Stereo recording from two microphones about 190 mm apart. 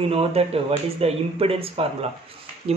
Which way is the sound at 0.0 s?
30° right (ahead or behind).